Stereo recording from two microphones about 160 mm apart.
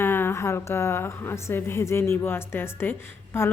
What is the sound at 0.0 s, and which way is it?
A woman's voice, 15° left (ahead or behind).